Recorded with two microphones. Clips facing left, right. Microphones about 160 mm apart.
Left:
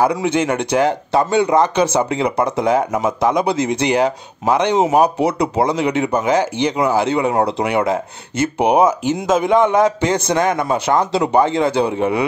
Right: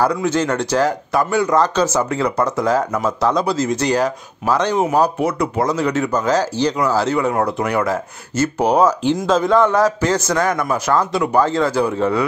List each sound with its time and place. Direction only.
0.0 s speech: 15° left (ahead or behind)